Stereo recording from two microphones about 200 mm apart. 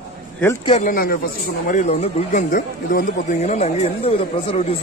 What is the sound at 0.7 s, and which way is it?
Speech, 40° left (ahead or behind).